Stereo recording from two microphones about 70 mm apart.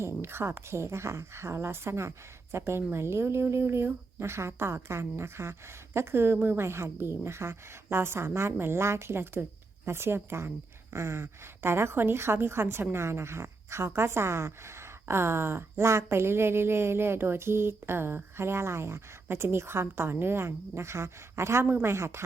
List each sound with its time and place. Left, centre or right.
0.0 s a woman's voice: right